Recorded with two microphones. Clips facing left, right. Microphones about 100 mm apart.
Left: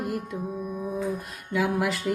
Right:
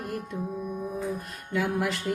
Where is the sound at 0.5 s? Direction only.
5° left (ahead or behind).